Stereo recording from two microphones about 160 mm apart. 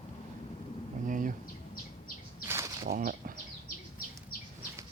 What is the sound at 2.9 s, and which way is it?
Speech, 60° right (ahead or behind).